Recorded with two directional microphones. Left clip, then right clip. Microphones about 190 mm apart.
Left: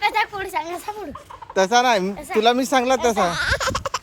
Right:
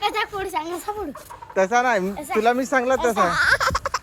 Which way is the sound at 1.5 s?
30° left (ahead or behind).